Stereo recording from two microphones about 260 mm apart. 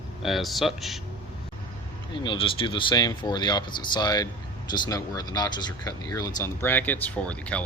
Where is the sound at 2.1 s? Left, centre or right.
Centre.